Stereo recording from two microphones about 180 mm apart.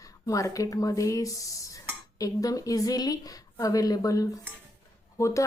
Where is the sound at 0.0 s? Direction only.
20° left (ahead or behind).